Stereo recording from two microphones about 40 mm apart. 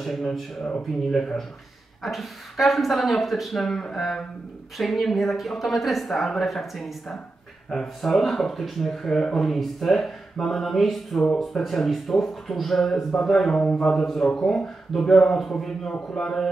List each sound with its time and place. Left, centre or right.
0.0 s speech: centre
2.0 s a man's voice: centre
15.9 s a man's voice: centre